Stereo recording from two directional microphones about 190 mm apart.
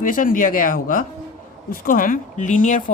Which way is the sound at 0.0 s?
45° left (ahead or behind).